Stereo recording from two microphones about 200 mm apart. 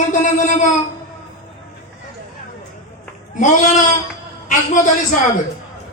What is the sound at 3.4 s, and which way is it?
A man's voice, 40° left (ahead or behind).